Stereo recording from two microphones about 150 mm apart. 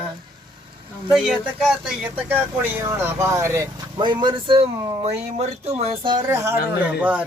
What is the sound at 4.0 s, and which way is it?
Speech, 30° right (ahead or behind).